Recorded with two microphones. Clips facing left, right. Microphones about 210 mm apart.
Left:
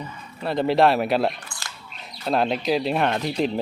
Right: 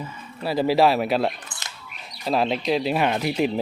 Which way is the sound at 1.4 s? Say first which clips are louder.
Left 1 dB; 20° right (ahead or behind).